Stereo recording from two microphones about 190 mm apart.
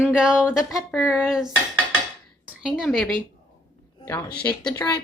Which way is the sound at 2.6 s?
5° left (ahead or behind).